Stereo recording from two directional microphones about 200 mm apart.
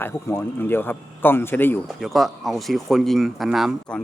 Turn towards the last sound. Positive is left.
turn(degrees=0)  # may be behind; listen again after turning